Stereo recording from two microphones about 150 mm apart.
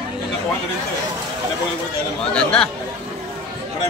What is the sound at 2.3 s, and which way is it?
Speech, 5° left (ahead or behind).